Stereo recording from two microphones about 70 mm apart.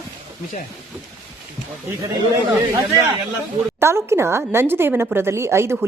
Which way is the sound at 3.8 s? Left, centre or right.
Right.